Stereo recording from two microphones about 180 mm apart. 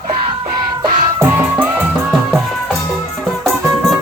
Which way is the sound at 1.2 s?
10° right (ahead or behind).